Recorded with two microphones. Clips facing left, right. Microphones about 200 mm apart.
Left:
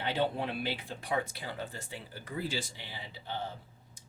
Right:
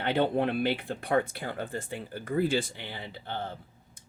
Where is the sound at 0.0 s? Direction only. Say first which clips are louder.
Right 6 dB; 60° right (ahead or behind).